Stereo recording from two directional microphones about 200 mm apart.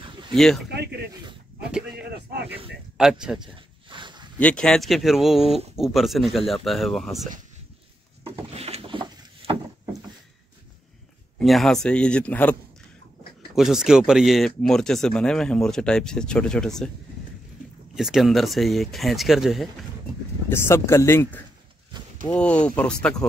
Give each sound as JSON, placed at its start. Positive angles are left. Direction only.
{"t": 0.3, "sound": "speech", "side_deg": 0}
{"t": 2.0, "sound": "speech", "side_deg": -55}
{"t": 3.0, "sound": "speech", "side_deg": -5}
{"t": 3.9, "sound": "a sound", "side_deg": -25}
{"t": 4.4, "sound": "speech", "side_deg": 5}
{"t": 8.2, "sound": "a sound", "side_deg": -30}
{"t": 11.3, "sound": "speech", "side_deg": 0}
{"t": 13.6, "sound": "speech", "side_deg": 0}
{"t": 17.9, "sound": "speech", "side_deg": 0}
{"t": 20.4, "sound": "speech", "side_deg": 10}